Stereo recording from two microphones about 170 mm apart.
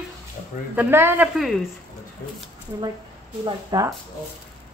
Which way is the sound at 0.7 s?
15° right (ahead or behind).